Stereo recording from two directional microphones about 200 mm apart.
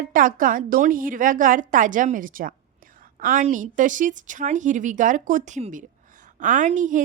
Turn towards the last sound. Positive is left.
turn(degrees=-40)  # may be behind; listen again after turning